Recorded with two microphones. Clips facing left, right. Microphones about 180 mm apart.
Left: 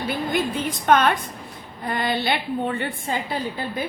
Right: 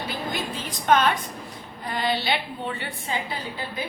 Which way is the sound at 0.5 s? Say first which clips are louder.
Even; 55° left (ahead or behind).